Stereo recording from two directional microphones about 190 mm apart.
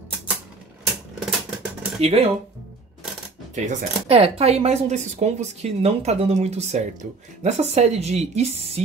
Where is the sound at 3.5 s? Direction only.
40° right (ahead or behind).